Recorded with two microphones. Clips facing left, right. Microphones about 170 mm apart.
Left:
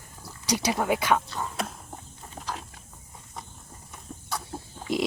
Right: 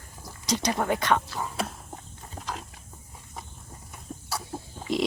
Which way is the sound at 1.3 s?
Centre (ahead or behind).